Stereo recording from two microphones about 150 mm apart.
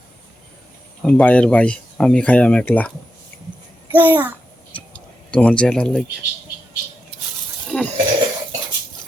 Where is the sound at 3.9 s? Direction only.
15° right (ahead or behind).